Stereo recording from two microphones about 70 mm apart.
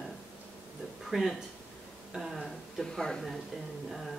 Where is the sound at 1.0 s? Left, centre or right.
Centre.